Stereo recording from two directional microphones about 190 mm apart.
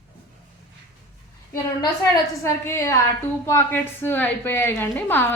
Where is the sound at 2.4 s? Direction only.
15° left (ahead or behind).